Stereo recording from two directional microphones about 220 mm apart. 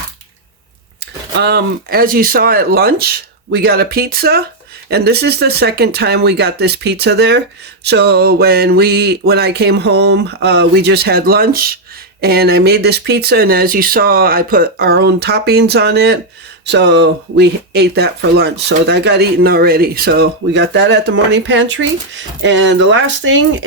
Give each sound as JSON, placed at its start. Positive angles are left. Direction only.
{"t": 1.4, "sound": "speech", "side_deg": -50}